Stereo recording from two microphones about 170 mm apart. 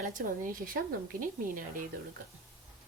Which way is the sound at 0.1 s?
55° right (ahead or behind).